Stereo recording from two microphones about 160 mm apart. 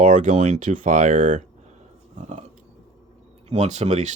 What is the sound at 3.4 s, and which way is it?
Speech, 45° right (ahead or behind).